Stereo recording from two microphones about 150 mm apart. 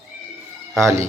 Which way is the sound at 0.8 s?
20° right (ahead or behind).